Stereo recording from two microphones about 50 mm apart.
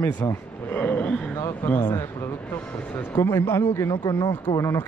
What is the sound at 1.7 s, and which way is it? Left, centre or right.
Speech, left.